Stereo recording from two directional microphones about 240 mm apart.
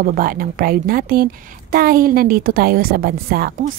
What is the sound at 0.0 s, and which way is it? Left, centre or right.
Speech, right.